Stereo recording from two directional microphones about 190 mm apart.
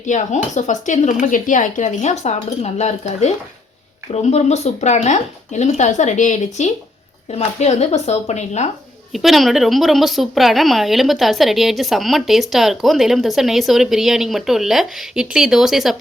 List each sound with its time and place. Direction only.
0.0 s speech: 40° left (ahead or behind)
9.1 s a woman's voice: centre (ahead or behind)